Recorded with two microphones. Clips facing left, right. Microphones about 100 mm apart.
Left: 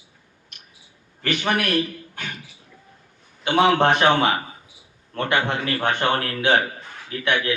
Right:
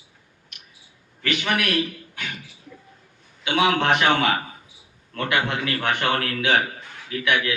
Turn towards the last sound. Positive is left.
turn(degrees=30)  # may be behind; listen again after turning